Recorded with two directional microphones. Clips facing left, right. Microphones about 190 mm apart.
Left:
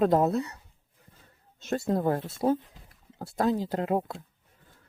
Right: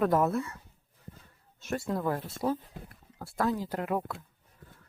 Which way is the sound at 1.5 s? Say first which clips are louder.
Left 3 dB; 20° left (ahead or behind).